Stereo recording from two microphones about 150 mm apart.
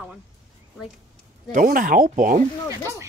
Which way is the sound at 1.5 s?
70° right (ahead or behind).